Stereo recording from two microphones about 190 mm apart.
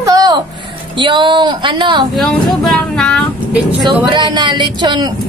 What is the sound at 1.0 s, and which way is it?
Speech, 25° right (ahead or behind).